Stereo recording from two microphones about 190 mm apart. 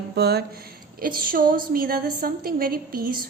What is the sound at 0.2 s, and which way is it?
A woman's voice, 55° right (ahead or behind).